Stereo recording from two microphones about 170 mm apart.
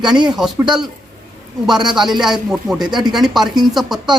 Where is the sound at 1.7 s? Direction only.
25° right (ahead or behind).